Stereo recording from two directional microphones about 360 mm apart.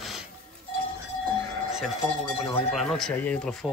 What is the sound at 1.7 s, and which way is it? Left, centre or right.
Speech, centre.